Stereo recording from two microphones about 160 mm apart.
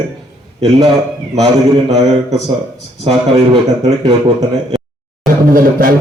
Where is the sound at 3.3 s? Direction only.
40° right (ahead or behind).